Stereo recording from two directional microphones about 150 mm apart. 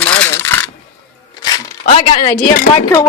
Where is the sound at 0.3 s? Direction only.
15° left (ahead or behind).